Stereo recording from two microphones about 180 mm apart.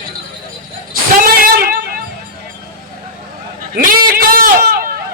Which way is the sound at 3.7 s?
50° right (ahead or behind).